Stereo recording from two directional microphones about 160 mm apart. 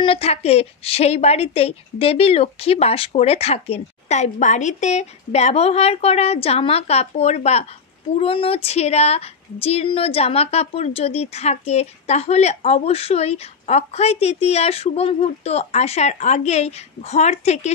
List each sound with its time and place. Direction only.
0.0 s speech: 40° left (ahead or behind)